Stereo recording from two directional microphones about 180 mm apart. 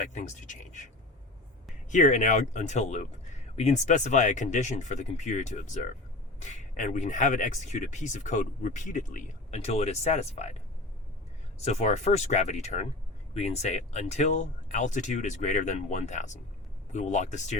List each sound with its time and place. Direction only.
0.0 s speech: 40° left (ahead or behind)
1.9 s speech: 45° left (ahead or behind)
11.6 s speech: 40° left (ahead or behind)